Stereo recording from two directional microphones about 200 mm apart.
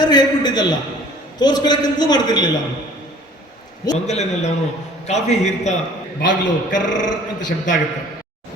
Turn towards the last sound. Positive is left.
turn(degrees=40)  # may be behind; listen again after turning